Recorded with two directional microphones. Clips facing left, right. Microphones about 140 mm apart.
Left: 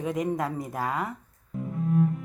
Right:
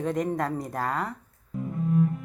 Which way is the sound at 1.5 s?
Centre (ahead or behind).